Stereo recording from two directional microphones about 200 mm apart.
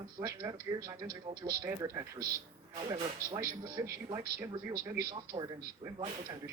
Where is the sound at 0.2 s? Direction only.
15° right (ahead or behind).